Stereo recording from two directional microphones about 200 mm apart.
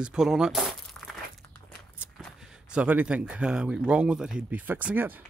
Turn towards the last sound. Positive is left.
turn(degrees=-10)  # may be behind; listen again after turning